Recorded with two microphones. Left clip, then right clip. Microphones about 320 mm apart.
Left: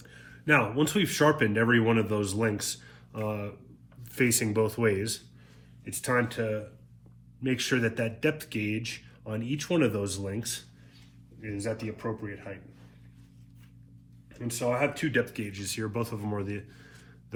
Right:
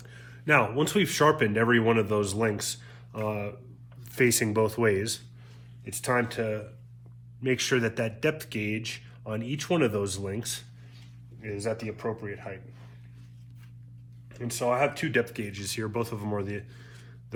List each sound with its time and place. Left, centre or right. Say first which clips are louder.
0.0 s speech: right 1 dB; centre
14.3 s speech: right 3 dB; centre